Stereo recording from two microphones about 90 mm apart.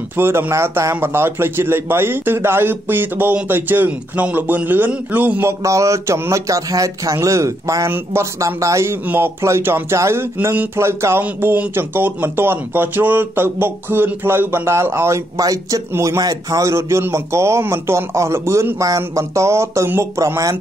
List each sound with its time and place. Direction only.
0.2 s a man's voice: 25° right (ahead or behind)
5.5 s a man's voice: 35° right (ahead or behind)
16.2 s a man's voice: 45° right (ahead or behind)